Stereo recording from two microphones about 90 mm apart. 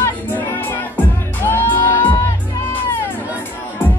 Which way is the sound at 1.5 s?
25° left (ahead or behind).